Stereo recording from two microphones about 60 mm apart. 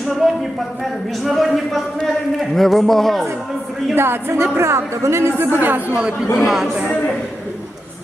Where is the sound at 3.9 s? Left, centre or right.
Right.